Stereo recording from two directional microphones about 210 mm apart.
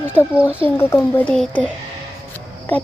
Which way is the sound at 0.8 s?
10° left (ahead or behind).